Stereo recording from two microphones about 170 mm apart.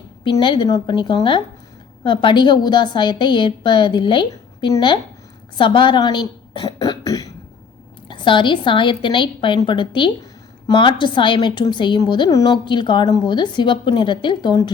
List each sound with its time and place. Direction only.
0.3 s a woman's voice: 25° left (ahead or behind)